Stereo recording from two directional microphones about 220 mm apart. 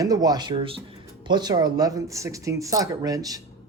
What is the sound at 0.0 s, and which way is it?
Speech, 15° right (ahead or behind).